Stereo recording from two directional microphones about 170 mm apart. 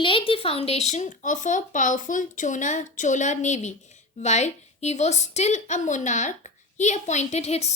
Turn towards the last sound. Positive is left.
turn(degrees=40)  # may be behind; listen again after turning